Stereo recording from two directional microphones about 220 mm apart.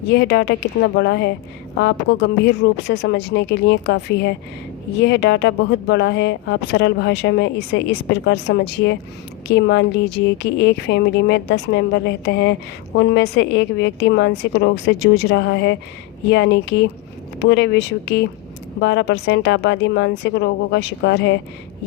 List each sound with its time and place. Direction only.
0.1 s speech: 50° left (ahead or behind)